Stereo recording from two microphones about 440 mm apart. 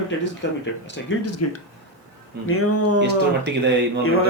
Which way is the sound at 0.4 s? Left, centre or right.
Left.